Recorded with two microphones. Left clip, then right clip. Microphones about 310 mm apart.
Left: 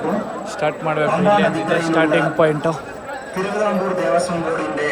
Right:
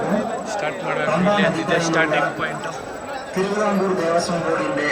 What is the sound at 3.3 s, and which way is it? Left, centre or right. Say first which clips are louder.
Speech: left 1 dB; left.